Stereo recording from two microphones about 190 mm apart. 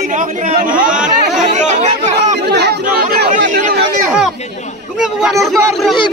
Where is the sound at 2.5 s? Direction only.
60° right (ahead or behind).